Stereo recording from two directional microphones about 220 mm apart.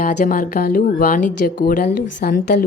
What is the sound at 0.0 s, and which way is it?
Speech, 40° left (ahead or behind).